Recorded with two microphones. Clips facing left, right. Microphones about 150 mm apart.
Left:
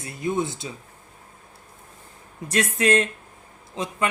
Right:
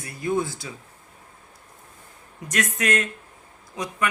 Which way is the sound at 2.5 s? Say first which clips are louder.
Left 4 dB; 30° left (ahead or behind).